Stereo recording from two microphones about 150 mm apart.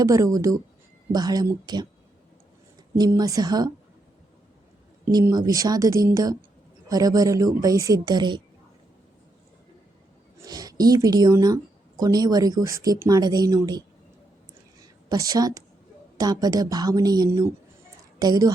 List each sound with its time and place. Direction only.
0.0 s speech: 20° right (ahead or behind)
3.0 s speech: 25° right (ahead or behind)
5.1 s speech: 25° right (ahead or behind)
10.4 s a woman's voice: 25° right (ahead or behind)